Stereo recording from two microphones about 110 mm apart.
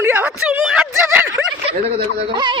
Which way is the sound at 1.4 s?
Centre (ahead or behind).